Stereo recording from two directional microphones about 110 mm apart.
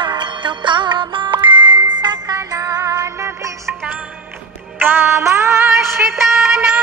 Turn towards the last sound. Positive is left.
turn(degrees=-5)  # may be behind; listen again after turning